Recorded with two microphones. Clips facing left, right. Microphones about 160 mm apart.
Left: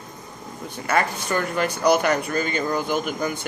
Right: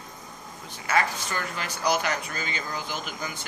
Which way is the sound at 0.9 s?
55° left (ahead or behind).